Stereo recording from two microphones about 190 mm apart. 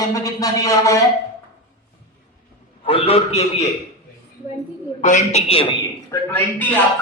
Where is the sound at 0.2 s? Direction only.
20° left (ahead or behind).